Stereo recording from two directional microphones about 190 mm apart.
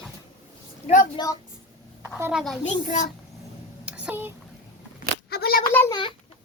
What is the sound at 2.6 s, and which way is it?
Speech, 40° left (ahead or behind).